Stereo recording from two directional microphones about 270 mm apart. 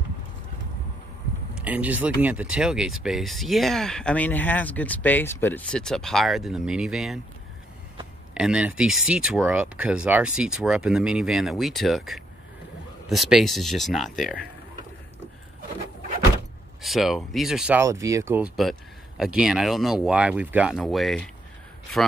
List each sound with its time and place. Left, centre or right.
1.5 s speech: centre
8.4 s speech: centre
16.8 s speech: centre